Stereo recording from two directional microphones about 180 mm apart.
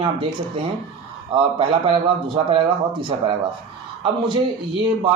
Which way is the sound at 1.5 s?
30° right (ahead or behind).